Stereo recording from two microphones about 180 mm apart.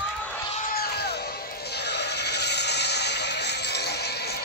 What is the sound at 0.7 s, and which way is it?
Music, 60° left (ahead or behind).